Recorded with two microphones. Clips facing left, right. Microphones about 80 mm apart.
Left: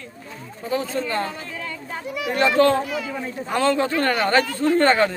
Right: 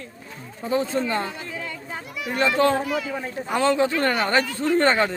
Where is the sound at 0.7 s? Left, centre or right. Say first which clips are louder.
Right 1 dB; right.